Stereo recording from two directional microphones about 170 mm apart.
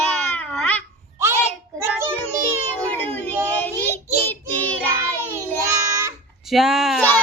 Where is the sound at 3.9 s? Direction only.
10° left (ahead or behind).